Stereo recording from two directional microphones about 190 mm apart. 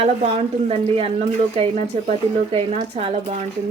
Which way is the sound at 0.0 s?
30° right (ahead or behind).